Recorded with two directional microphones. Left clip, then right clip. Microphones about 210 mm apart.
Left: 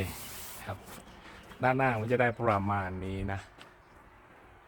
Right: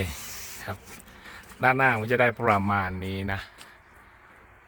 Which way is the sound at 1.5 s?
40° right (ahead or behind).